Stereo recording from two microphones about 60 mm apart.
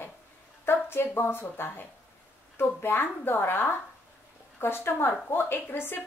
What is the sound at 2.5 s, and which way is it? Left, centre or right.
A woman's voice, left.